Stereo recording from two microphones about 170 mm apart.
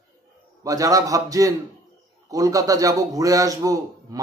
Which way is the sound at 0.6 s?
20° right (ahead or behind).